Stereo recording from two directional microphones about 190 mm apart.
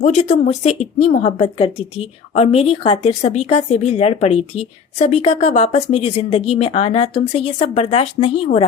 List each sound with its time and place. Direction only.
0.0 s speech: 35° left (ahead or behind)